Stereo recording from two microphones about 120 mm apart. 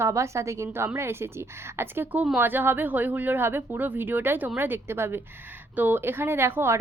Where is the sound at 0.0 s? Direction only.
25° right (ahead or behind).